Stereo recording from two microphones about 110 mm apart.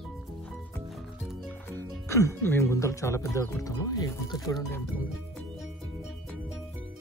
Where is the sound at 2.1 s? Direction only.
25° left (ahead or behind).